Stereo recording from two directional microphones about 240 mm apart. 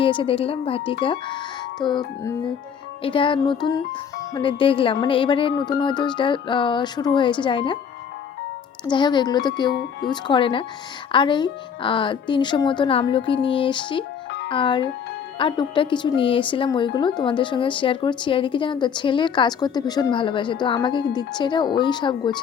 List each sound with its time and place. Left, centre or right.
0.0 s speech: left
8.9 s speech: centre